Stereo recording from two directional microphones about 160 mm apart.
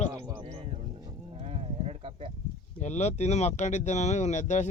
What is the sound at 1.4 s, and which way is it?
Sheep, 40° right (ahead or behind).